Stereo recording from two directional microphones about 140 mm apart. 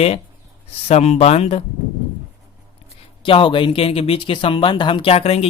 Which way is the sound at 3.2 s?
35° left (ahead or behind).